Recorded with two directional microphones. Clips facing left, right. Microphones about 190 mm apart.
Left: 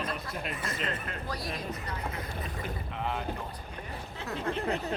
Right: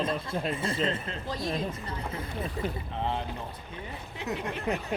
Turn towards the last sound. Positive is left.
turn(degrees=-15)  # may be behind; listen again after turning